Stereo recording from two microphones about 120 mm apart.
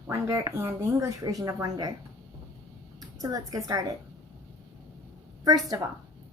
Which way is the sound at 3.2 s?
30° right (ahead or behind).